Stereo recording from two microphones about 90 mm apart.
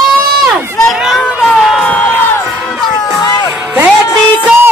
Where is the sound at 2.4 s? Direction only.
Centre (ahead or behind).